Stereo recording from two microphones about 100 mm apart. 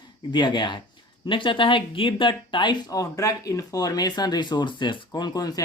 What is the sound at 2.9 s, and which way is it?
Speech, 35° left (ahead or behind).